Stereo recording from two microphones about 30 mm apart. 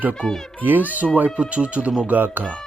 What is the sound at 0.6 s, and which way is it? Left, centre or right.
Speech, right.